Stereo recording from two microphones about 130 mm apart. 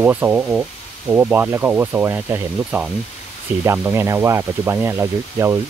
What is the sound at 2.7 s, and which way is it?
Speech, 5° right (ahead or behind).